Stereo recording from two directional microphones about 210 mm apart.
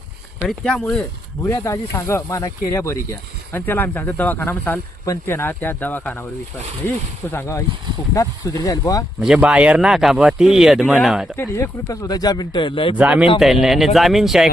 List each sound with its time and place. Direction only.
0.4 s speech: 5° left (ahead or behind)
1.5 s speech: 15° left (ahead or behind)
9.2 s speech: 5° right (ahead or behind)
11.3 s speech: 15° left (ahead or behind)
13.0 s a man's voice: 5° right (ahead or behind)